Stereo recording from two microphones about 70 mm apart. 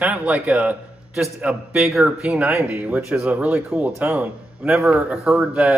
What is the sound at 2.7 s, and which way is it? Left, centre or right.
A man's voice, right.